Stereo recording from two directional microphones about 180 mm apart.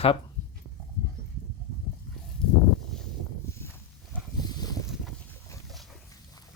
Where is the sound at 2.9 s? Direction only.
Centre (ahead or behind).